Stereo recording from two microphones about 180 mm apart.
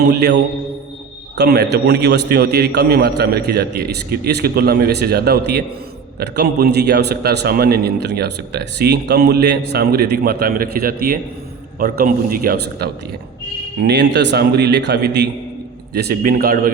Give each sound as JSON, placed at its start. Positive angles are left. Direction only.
{"t": 0.0, "sound": "a man's voice", "side_deg": -70}
{"t": 13.8, "sound": "a man's voice", "side_deg": -70}